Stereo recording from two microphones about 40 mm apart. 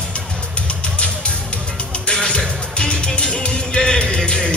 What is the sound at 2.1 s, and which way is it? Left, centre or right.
Music, left.